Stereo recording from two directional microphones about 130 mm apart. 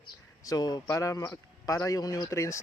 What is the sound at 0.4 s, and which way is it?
Speech, 30° left (ahead or behind).